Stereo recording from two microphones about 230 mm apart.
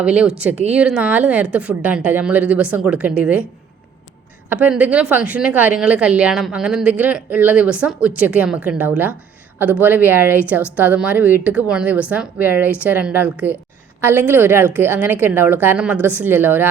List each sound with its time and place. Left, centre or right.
0.0 s a woman's voice: centre
4.4 s a woman's voice: centre